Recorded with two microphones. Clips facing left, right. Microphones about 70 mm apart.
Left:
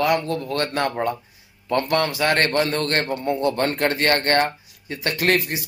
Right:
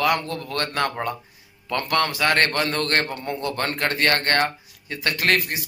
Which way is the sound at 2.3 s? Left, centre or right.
Right.